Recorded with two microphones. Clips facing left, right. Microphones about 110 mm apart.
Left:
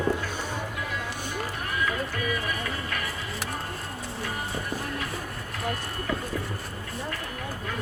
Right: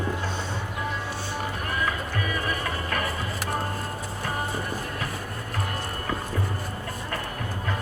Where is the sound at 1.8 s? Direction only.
40° right (ahead or behind).